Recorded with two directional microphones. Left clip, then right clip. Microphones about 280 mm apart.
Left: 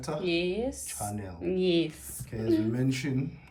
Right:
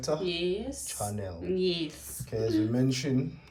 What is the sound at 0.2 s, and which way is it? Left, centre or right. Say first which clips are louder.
Speech: left 2 dB; centre.